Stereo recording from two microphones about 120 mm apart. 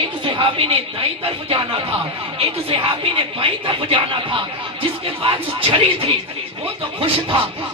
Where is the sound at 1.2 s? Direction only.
50° right (ahead or behind).